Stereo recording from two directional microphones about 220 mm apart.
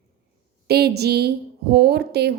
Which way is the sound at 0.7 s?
45° right (ahead or behind).